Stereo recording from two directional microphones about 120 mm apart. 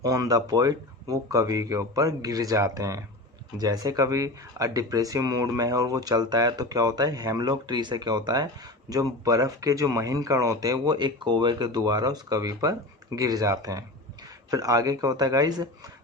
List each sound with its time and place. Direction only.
0.0 s speech: 30° right (ahead or behind)